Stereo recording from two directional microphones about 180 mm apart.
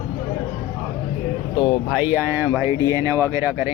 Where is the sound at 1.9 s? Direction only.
10° right (ahead or behind).